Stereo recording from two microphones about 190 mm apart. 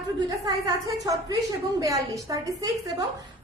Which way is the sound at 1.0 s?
20° right (ahead or behind).